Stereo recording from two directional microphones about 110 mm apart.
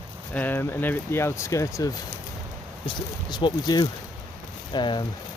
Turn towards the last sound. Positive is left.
turn(degrees=45)  # may be behind; listen again after turning